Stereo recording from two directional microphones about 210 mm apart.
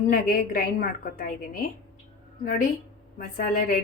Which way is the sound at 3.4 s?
40° left (ahead or behind).